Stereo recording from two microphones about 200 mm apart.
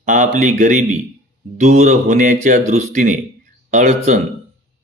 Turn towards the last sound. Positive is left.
turn(degrees=-35)  # may be behind; listen again after turning